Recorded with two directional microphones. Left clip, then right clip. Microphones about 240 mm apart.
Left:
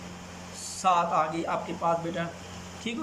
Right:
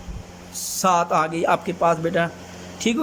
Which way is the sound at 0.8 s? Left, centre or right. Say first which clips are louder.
Right 5 dB; right.